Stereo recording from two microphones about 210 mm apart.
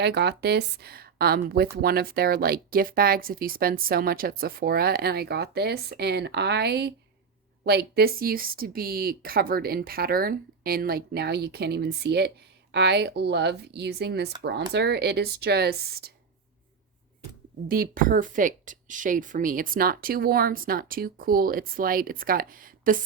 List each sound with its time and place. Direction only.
0.0 s a woman's voice: 55° right (ahead or behind)
17.7 s a woman's voice: 40° right (ahead or behind)